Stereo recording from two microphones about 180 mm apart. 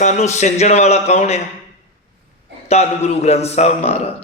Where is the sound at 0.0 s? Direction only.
40° left (ahead or behind).